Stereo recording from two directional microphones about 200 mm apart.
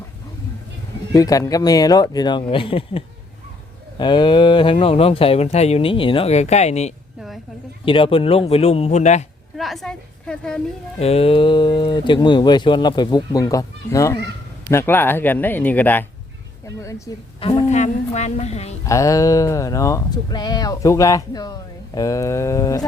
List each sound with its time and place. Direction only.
1.1 s speech: 15° left (ahead or behind); by 9.2 s 35° left (ahead or behind)
9.6 s a woman's voice: centre (ahead or behind)
11.0 s speech: 30° left (ahead or behind)
17.7 s a woman's voice: 35° left (ahead or behind)
18.9 s speech: 15° left (ahead or behind)